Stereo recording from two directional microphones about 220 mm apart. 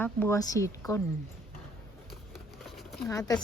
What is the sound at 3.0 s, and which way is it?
Speech, 10° left (ahead or behind).